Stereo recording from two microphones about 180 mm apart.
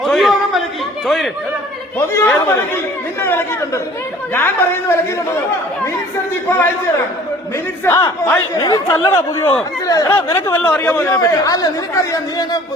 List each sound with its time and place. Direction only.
0.0 s a sound: centre (ahead or behind)
1.0 s speech: centre (ahead or behind)
2.1 s speech: 10° left (ahead or behind)
7.9 s a man's voice: 15° left (ahead or behind)